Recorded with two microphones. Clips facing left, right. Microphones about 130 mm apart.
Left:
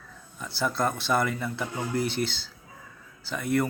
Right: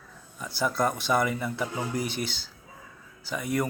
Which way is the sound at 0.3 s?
10° right (ahead or behind).